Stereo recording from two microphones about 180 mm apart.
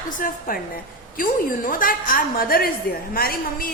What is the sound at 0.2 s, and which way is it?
A woman's voice, 50° left (ahead or behind).